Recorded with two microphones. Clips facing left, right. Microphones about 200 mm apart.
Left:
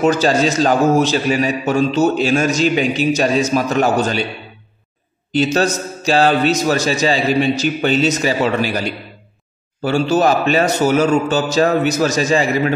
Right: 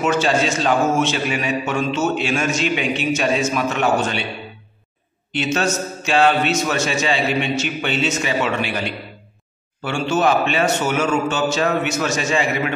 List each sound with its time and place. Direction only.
0.0 s a man's voice: 35° left (ahead or behind)
5.3 s a man's voice: 35° left (ahead or behind)